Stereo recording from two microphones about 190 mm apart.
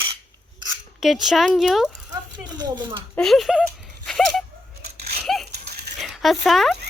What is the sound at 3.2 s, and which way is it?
Speech, centre (ahead or behind).